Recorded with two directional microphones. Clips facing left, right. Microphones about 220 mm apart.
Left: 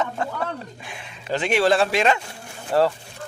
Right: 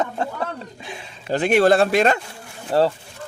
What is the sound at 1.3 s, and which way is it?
Speech, 50° right (ahead or behind).